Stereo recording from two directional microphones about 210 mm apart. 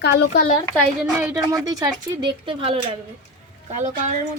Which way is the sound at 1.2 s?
5° right (ahead or behind).